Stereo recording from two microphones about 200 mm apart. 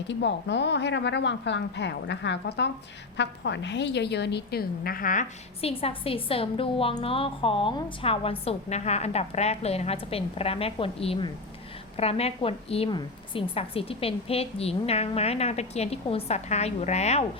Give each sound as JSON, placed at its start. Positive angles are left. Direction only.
{"t": 0.1, "sound": "a woman's voice", "side_deg": 60}
{"t": 5.6, "sound": "a woman's voice", "side_deg": 30}